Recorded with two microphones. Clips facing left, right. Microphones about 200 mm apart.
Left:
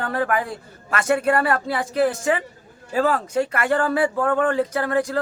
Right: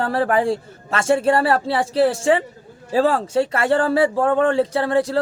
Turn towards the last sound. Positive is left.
turn(degrees=-30)  # may be behind; listen again after turning